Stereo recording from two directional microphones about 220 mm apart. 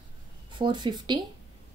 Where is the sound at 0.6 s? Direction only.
20° right (ahead or behind).